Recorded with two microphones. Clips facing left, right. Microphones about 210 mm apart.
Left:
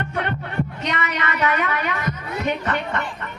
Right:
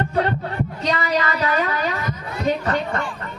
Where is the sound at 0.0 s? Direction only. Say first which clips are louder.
Right 5 dB; 35° right (ahead or behind).